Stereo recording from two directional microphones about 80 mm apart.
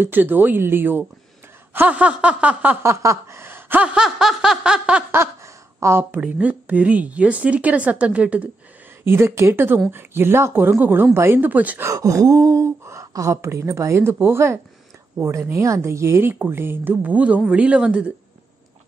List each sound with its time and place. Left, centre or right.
0.0 s speech: right
2.8 s a sound: right
3.8 s speech: centre
5.1 s a sound: right
6.2 s speech: centre
9.0 s speech: right
11.8 s speech: right; by 18.1 s centre